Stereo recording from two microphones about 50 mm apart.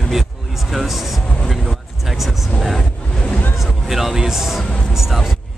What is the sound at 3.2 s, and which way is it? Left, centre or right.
Music, left.